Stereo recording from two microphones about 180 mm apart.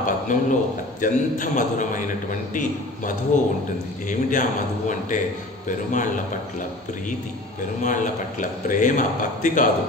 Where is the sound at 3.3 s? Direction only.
45° left (ahead or behind).